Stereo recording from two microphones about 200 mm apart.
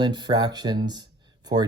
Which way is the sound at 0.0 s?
20° right (ahead or behind).